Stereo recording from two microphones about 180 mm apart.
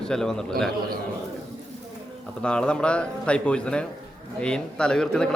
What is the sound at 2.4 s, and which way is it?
A man's voice, 5° left (ahead or behind).